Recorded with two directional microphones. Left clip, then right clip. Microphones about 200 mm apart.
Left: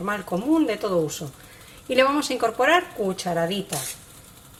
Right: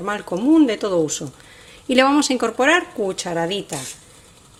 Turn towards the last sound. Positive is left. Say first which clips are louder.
# right 2 dB
turn(degrees=-45)  # may be behind; listen again after turning